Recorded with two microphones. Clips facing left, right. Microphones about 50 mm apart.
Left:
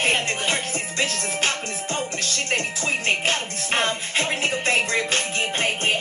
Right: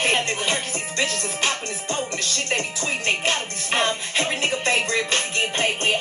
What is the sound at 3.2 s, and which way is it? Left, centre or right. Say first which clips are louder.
Music: even; centre.